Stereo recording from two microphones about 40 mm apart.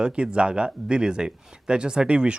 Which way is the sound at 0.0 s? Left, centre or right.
Right.